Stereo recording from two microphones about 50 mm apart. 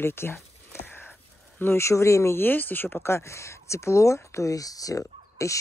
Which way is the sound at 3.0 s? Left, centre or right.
Left.